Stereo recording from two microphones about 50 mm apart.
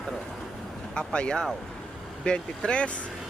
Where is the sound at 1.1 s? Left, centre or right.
Centre.